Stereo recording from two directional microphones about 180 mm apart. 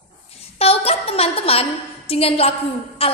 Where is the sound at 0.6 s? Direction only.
35° left (ahead or behind).